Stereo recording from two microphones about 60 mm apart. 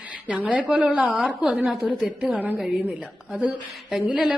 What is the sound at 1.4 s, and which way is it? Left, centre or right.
Speech, centre.